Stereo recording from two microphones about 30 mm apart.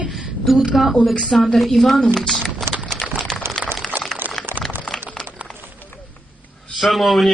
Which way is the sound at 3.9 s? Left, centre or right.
Right.